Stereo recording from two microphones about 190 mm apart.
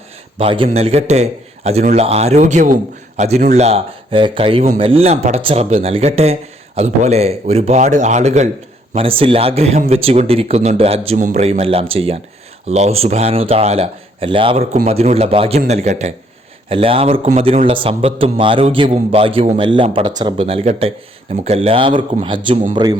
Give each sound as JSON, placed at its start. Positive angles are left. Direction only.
{"t": 0.3, "sound": "a man's voice", "side_deg": -30}